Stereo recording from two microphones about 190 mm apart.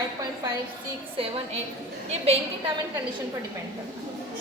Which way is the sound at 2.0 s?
35° right (ahead or behind).